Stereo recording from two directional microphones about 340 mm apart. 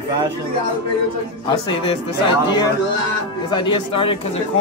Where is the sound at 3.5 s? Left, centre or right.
Centre.